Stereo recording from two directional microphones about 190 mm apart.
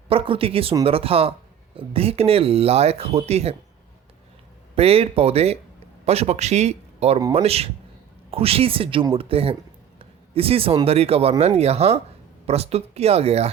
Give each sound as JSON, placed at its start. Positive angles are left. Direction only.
{"t": 0.1, "sound": "speech", "side_deg": -30}
{"t": 4.7, "sound": "speech", "side_deg": -30}